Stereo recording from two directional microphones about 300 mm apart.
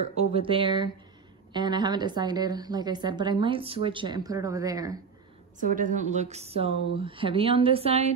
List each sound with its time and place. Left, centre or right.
0.1 s a woman's voice: centre
5.6 s speech: right